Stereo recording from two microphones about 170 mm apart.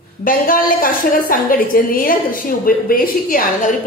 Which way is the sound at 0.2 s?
55° left (ahead or behind).